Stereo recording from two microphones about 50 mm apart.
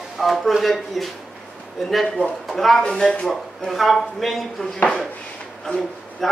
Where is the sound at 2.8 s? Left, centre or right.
Centre.